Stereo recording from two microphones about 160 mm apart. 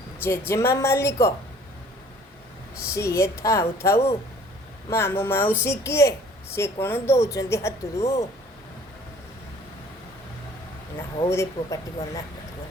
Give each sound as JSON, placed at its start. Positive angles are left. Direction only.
{"t": 0.2, "sound": "speech", "side_deg": 15}
{"t": 2.9, "sound": "speech", "side_deg": 20}
{"t": 11.3, "sound": "speech", "side_deg": 20}